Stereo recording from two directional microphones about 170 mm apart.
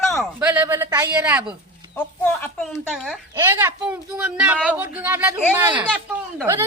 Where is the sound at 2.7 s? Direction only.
5° right (ahead or behind).